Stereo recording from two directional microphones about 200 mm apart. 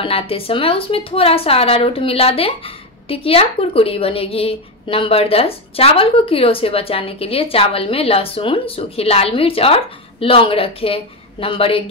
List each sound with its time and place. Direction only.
0.0 s a woman's voice: 30° left (ahead or behind)